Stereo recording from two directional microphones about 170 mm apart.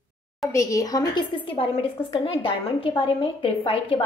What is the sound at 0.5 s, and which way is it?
A woman's voice, 20° left (ahead or behind).